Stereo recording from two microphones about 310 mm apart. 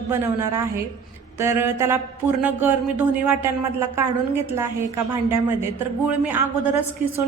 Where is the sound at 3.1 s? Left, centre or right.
Centre.